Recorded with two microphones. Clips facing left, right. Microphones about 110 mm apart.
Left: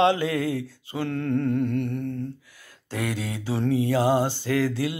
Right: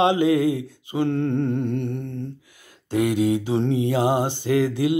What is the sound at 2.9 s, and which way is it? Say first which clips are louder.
Mantra: right 10 dB; 20° right (ahead or behind).